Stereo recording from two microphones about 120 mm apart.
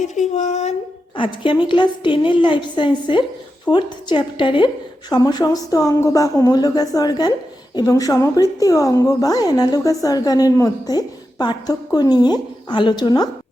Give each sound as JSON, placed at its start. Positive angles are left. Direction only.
{"t": 0.0, "sound": "speech", "side_deg": 80}
{"t": 1.1, "sound": "a woman's voice", "side_deg": 45}